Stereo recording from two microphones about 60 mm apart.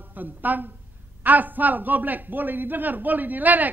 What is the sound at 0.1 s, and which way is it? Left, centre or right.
Speech, right.